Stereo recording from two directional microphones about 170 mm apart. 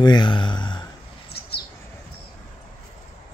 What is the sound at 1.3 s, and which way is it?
Bird, 70° left (ahead or behind).